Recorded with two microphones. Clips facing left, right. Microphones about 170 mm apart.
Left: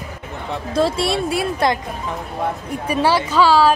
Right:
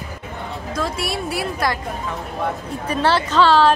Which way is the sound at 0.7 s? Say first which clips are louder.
Left 7 dB; 30° left (ahead or behind).